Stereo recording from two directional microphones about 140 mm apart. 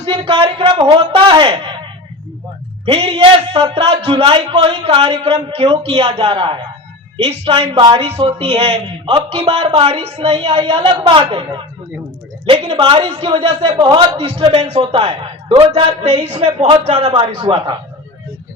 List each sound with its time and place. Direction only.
0.0 s a man's voice: 40° right (ahead or behind)
2.8 s a man's voice: 40° right (ahead or behind)